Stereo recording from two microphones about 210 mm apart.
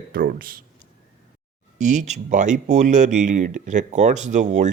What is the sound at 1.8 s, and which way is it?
Speech, 35° right (ahead or behind).